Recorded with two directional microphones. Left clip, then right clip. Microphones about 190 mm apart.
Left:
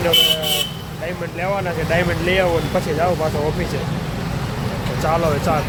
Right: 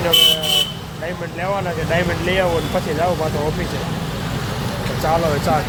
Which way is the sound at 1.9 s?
10° left (ahead or behind).